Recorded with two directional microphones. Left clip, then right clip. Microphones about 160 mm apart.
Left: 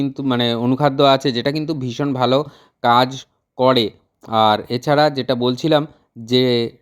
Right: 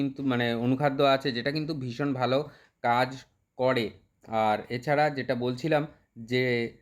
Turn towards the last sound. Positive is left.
turn(degrees=40)  # may be behind; listen again after turning